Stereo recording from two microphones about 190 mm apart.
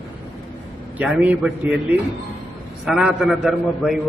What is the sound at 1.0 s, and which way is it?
A man's voice, 5° right (ahead or behind).